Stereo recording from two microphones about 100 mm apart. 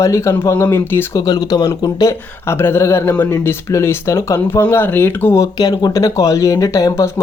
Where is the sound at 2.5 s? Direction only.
25° left (ahead or behind).